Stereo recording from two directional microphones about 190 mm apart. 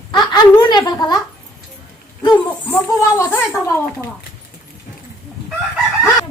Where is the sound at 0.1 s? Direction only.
25° left (ahead or behind).